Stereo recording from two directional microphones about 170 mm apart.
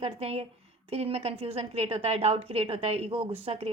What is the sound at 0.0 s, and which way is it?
A woman's voice, 35° right (ahead or behind).